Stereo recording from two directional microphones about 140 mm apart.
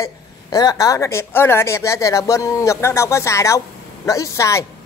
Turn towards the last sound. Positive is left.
turn(degrees=20)  # may be behind; listen again after turning